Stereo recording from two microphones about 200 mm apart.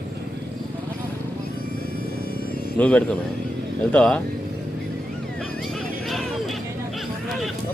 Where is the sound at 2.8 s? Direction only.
5° left (ahead or behind).